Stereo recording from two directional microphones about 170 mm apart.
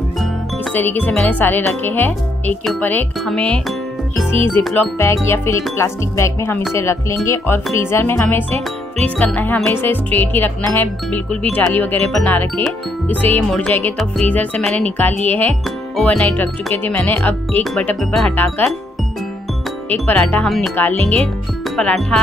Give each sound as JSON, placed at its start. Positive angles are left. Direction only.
{"t": 0.7, "sound": "speech", "side_deg": 10}
{"t": 4.6, "sound": "speech", "side_deg": 10}
{"t": 19.9, "sound": "speech", "side_deg": 10}